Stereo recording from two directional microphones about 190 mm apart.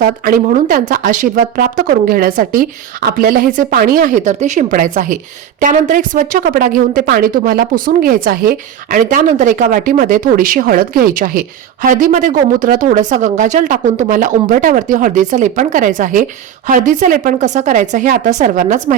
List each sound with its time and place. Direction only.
0.0 s speech: 45° right (ahead or behind)